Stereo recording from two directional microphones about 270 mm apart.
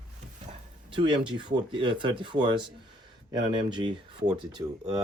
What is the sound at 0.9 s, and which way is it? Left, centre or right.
Speech, centre.